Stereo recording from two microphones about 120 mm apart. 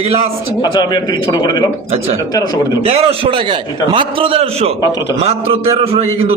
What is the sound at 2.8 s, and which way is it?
A man's voice, 55° right (ahead or behind).